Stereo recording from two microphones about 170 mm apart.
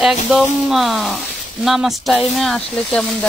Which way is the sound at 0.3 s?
Centre (ahead or behind).